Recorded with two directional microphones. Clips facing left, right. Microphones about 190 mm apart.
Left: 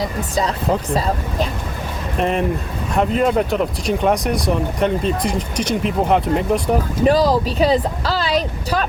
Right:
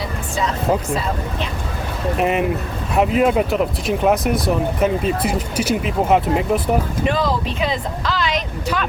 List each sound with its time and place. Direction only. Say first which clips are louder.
0.0 s music: left 3 dB; 40° left (ahead or behind)
2.1 s speech: even; 5° right (ahead or behind)
7.0 s speech: left 5 dB; 35° left (ahead or behind)